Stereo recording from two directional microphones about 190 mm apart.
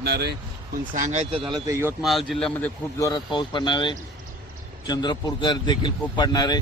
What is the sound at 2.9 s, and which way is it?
Speech, 20° left (ahead or behind).